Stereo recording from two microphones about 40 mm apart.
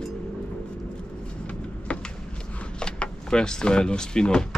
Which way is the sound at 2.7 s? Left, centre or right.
Left.